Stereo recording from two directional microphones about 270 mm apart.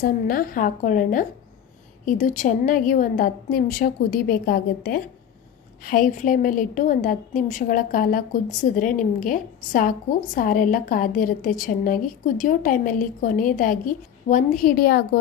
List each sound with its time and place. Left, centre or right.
0.0 s a woman's voice: left